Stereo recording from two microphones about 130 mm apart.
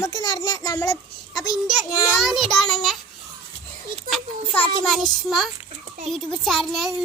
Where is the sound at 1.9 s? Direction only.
25° left (ahead or behind).